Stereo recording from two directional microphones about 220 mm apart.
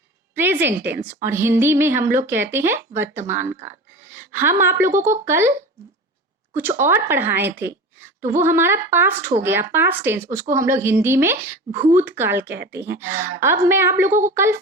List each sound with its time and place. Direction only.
0.3 s a sound: 10° right (ahead or behind)
1.0 s a woman's voice: 10° right (ahead or behind)
3.7 s gasp: 10° right (ahead or behind)
4.6 s a woman's voice: 10° right (ahead or behind)
14.1 s speech: 35° right (ahead or behind)
14.3 s a woman's voice: 10° right (ahead or behind)